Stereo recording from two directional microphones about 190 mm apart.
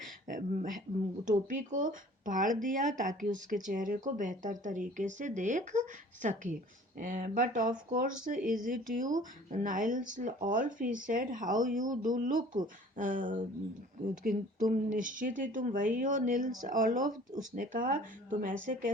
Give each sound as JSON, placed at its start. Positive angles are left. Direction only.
{"t": 0.3, "sound": "speech", "side_deg": -40}